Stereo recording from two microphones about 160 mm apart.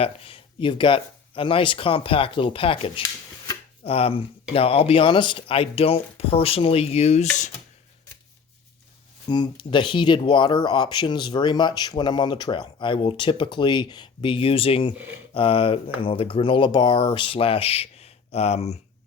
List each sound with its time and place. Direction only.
0.0 s speech: 35° left (ahead or behind)
9.3 s speech: 30° left (ahead or behind)